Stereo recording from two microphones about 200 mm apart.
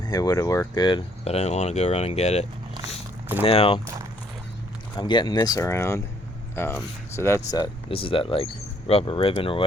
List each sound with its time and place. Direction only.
0.0 s speech: 20° left (ahead or behind)
4.9 s speech: 20° left (ahead or behind)